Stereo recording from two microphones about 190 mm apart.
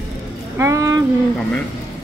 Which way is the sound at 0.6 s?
15° right (ahead or behind).